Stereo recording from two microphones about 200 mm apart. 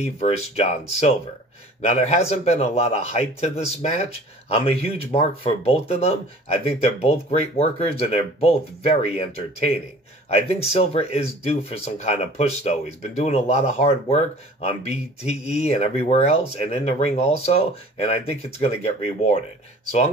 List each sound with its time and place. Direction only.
0.0 s a man's voice: 30° left (ahead or behind)